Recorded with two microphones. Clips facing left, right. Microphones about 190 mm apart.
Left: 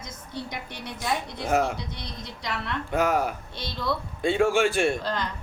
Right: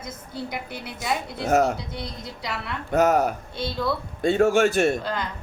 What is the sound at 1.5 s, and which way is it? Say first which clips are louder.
Speech: right 4 dB; 45° right (ahead or behind).